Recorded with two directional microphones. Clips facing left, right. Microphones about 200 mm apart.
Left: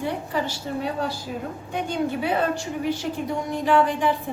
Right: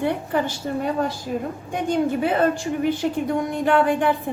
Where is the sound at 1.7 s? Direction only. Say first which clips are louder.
Right 4 dB; 50° right (ahead or behind).